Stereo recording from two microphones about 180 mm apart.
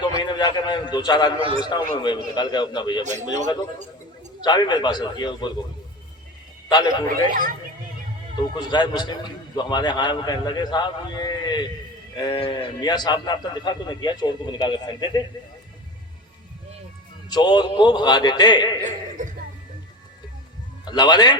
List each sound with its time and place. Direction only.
0.2 s a man's voice: 25° left (ahead or behind)
3.0 s a man's voice: 40° right (ahead or behind)
4.4 s a man's voice: 25° left (ahead or behind)
6.7 s a man's voice: 25° left (ahead or behind)
7.1 s speech: 50° right (ahead or behind)
8.4 s a man's voice: 25° left (ahead or behind)
17.2 s a man's voice: 25° left (ahead or behind)
18.9 s speech: 45° right (ahead or behind)
20.8 s a man's voice: 25° left (ahead or behind)